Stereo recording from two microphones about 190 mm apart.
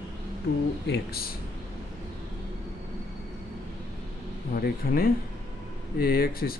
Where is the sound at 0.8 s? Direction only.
55° left (ahead or behind).